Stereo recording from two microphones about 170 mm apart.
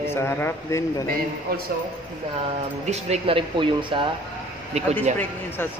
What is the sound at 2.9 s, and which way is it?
Speech, 35° right (ahead or behind).